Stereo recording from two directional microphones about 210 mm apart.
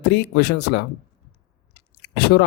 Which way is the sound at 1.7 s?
50° left (ahead or behind).